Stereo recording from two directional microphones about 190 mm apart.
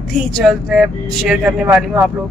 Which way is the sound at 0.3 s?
Centre (ahead or behind).